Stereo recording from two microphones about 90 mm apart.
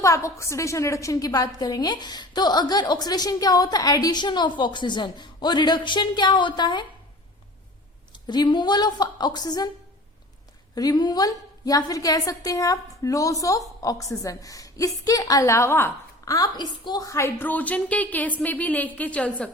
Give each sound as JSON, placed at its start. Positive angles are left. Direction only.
{"t": 0.0, "sound": "a woman's voice", "side_deg": 35}
{"t": 8.1, "sound": "a woman's voice", "side_deg": 55}
{"t": 10.8, "sound": "a woman's voice", "side_deg": 50}
{"t": 16.2, "sound": "a woman's voice", "side_deg": 40}
{"t": 17.1, "sound": "a woman's voice", "side_deg": 30}